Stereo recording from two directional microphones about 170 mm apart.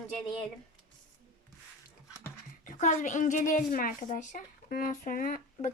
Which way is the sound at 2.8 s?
45° left (ahead or behind).